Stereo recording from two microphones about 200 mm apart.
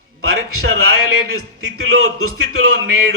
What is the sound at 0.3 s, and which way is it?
A man's voice, 90° right.